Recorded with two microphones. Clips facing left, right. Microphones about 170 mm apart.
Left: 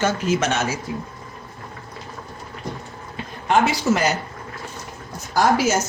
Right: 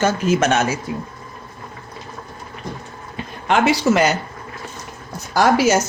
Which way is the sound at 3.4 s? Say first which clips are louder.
Right 2 dB; 75° right (ahead or behind).